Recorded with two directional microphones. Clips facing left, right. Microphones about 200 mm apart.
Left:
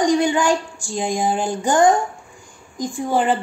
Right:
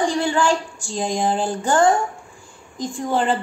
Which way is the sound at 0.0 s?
15° left (ahead or behind).